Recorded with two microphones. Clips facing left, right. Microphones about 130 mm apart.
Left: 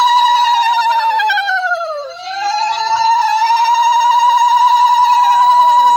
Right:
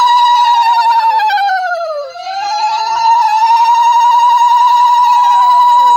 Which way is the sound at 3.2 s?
20° right (ahead or behind).